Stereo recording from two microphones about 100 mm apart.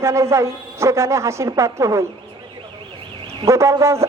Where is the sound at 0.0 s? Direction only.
30° right (ahead or behind).